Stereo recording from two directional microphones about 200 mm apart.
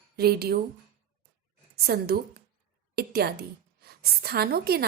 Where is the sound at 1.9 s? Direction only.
50° right (ahead or behind).